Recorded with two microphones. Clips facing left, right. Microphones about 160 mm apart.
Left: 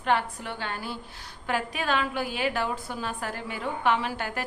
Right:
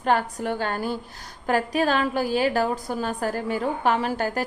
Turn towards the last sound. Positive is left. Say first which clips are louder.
# right 5 dB
turn(degrees=-40)  # may be behind; listen again after turning